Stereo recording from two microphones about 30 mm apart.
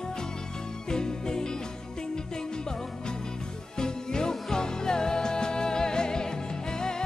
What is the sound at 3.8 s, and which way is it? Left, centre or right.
Music, left.